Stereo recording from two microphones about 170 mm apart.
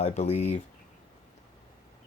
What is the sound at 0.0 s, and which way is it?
Speech, 40° left (ahead or behind).